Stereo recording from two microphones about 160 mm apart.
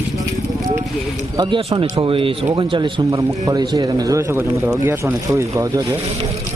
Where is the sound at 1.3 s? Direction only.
30° right (ahead or behind).